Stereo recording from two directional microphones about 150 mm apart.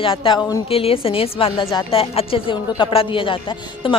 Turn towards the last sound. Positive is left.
turn(degrees=35)  # may be behind; listen again after turning